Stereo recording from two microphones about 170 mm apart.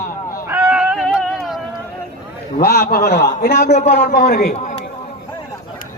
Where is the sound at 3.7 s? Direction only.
45° left (ahead or behind).